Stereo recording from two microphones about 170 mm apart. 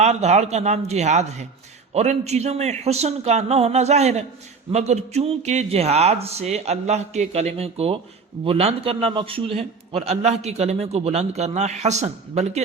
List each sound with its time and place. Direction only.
0.0 s a man's voice: 40° right (ahead or behind)